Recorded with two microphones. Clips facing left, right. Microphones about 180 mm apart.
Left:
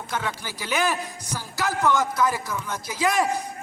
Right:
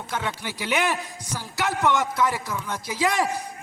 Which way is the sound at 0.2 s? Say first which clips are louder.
Right 1 dB; 25° right (ahead or behind).